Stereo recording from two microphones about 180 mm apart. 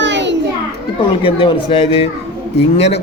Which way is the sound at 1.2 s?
30° left (ahead or behind).